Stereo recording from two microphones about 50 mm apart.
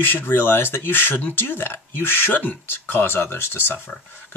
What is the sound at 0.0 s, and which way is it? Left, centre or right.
Speech, left.